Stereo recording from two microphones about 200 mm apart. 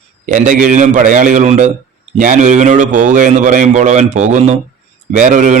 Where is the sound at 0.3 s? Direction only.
40° right (ahead or behind).